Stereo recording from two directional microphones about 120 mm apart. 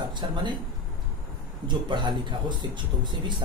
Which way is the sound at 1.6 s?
40° right (ahead or behind).